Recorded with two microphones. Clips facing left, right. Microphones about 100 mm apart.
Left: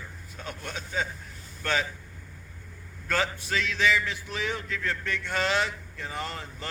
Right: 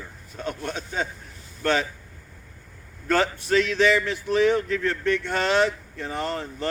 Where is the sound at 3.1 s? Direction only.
45° right (ahead or behind).